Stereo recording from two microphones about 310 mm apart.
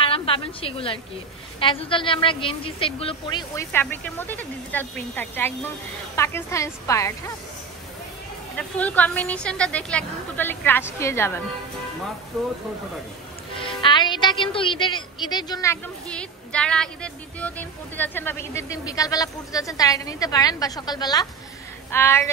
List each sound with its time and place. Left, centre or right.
0.0 s a woman's voice: centre
8.5 s a woman's voice: centre
13.6 s a woman's voice: centre